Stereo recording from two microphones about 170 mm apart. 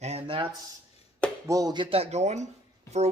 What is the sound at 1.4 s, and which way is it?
Speech, 20° right (ahead or behind).